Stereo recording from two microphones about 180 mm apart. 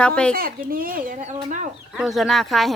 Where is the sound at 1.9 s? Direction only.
Centre (ahead or behind).